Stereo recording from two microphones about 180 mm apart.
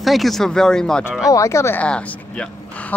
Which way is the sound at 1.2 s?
15° left (ahead or behind).